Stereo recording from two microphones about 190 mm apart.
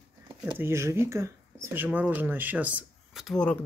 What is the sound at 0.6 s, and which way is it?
Speech, 15° right (ahead or behind).